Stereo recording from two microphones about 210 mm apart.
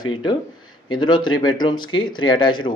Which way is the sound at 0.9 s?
20° left (ahead or behind).